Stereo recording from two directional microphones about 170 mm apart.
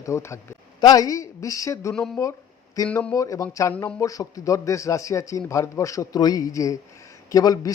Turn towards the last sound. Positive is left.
turn(degrees=20)  # may be behind; listen again after turning